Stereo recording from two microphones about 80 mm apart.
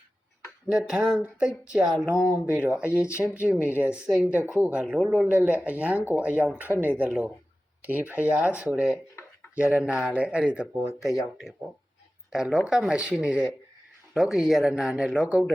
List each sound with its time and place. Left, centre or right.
0.7 s speech: centre